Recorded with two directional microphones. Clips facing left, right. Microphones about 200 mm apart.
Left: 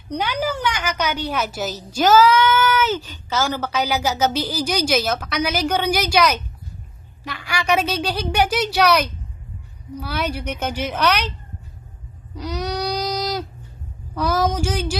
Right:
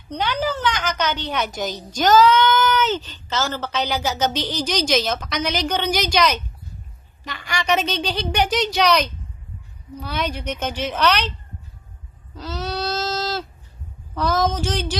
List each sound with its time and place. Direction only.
0.1 s a woman's voice: 10° left (ahead or behind)
12.4 s baby cry: 15° left (ahead or behind)
14.1 s a woman's voice: 10° left (ahead or behind)